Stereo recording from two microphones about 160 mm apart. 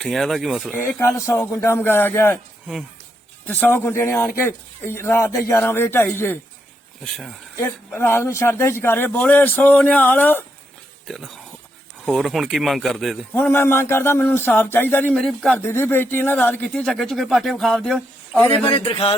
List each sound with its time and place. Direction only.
0.0 s speech: centre (ahead or behind)
0.8 s speech: 15° left (ahead or behind)
3.4 s speech: 10° left (ahead or behind)
7.0 s speech: centre (ahead or behind)
7.5 s speech: 15° left (ahead or behind)
13.3 s speech: 15° left (ahead or behind)
15.2 s speech: centre (ahead or behind)
16.8 s speech: centre (ahead or behind)
18.5 s a man's voice: 35° left (ahead or behind)